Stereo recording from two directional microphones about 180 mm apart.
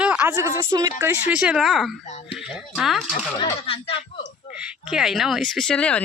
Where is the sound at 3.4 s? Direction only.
35° left (ahead or behind).